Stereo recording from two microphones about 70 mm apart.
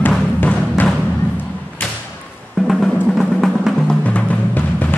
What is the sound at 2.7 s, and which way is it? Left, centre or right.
Drum, centre.